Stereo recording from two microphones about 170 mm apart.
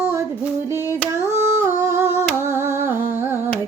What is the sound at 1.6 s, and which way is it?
Music, 15° right (ahead or behind).